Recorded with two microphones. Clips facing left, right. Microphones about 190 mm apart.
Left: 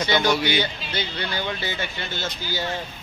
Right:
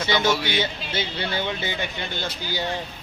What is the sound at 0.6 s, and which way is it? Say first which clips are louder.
Speech: even; 25° right (ahead or behind).